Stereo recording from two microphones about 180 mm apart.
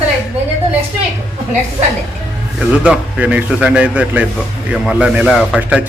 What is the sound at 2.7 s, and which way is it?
A man's voice, 5° right (ahead or behind).